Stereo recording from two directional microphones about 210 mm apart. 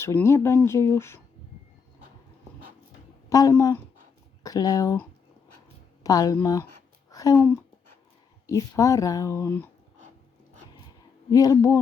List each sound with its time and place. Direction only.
0.0 s speech: 10° left (ahead or behind)
3.2 s speech: 15° left (ahead or behind)
11.3 s speech: 15° left (ahead or behind)